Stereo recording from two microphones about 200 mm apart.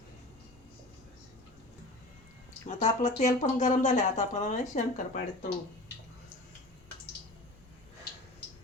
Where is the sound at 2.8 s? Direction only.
35° left (ahead or behind).